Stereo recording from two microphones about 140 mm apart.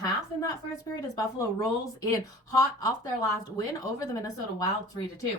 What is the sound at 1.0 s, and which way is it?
A woman's voice, 25° left (ahead or behind).